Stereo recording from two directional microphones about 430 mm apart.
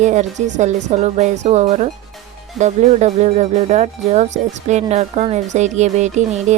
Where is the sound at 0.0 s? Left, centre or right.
Centre.